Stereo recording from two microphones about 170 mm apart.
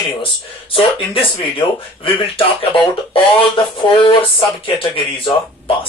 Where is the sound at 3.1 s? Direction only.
30° left (ahead or behind).